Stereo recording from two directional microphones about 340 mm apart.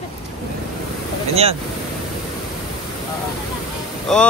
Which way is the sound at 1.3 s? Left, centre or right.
Centre.